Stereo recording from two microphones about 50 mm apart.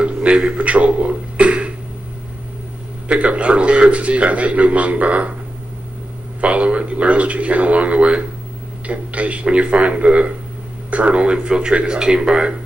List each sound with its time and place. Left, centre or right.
0.0 s a sound: right
3.1 s a man's voice: right
6.4 s a man's voice: right